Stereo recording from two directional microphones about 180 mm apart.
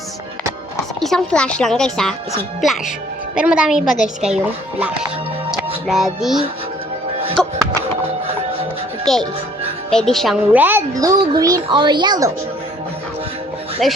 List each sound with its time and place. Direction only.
0.9 s speech: centre (ahead or behind)
5.5 s music: centre (ahead or behind)
9.1 s a child's voice: centre (ahead or behind); by 12.3 s 25° right (ahead or behind)
13.8 s speech: centre (ahead or behind)